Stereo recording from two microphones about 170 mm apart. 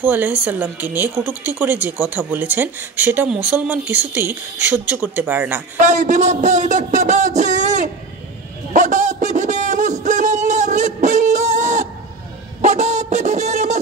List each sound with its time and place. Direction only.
0.0 s speech: 10° right (ahead or behind)
5.8 s speech: 45° right (ahead or behind)
8.7 s a sound: 45° right (ahead or behind)